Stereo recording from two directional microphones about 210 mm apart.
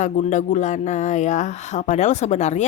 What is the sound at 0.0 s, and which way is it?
Speech, 35° left (ahead or behind).